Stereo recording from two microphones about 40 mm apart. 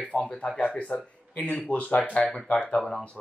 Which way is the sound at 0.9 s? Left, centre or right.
Left.